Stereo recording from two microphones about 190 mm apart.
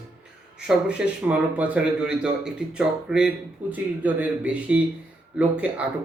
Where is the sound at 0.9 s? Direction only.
5° right (ahead or behind).